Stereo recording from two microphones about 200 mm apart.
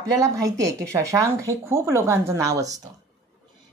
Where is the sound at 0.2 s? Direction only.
15° right (ahead or behind).